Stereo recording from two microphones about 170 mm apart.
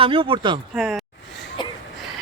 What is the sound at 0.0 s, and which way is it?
Speech, 30° right (ahead or behind).